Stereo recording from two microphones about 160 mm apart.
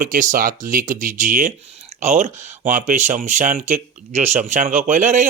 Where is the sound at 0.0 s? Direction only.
55° right (ahead or behind).